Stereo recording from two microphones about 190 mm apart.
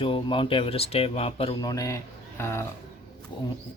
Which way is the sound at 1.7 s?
15° left (ahead or behind).